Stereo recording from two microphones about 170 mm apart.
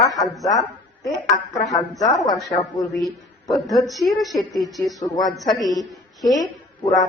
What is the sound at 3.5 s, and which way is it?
A woman's voice, centre (ahead or behind).